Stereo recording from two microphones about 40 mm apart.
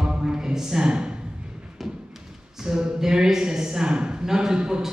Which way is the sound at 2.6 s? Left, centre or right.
Centre.